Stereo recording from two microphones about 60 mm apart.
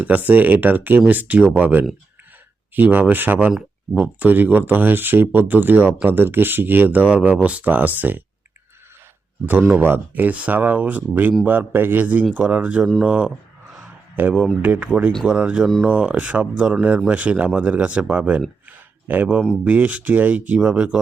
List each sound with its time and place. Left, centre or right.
0.0 s speech: right
7.1 s speech: centre
9.5 s speech: right
14.2 s speech: right